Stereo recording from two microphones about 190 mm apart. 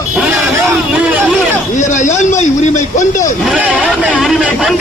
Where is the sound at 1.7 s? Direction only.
40° left (ahead or behind).